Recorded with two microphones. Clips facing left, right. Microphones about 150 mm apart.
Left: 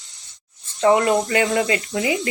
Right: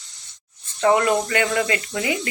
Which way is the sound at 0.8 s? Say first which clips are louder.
Left 2 dB; 20° left (ahead or behind).